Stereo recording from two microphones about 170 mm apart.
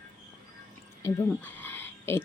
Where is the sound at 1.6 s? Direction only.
15° left (ahead or behind).